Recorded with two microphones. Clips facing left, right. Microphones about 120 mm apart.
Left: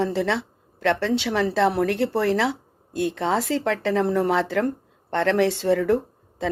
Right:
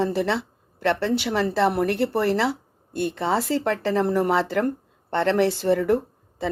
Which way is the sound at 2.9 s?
90° left.